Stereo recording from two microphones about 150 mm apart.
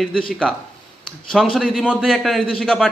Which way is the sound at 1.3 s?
Centre (ahead or behind).